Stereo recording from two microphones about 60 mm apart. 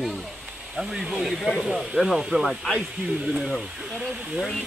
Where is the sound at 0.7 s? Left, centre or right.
Centre.